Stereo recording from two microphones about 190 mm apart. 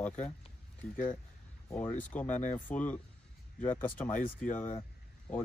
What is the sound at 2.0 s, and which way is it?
Speech, 10° left (ahead or behind).